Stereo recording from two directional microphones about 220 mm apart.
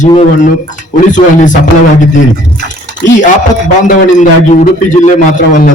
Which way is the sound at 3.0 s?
35° left (ahead or behind).